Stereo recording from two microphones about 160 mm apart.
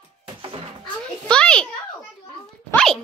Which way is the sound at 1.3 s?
5° left (ahead or behind).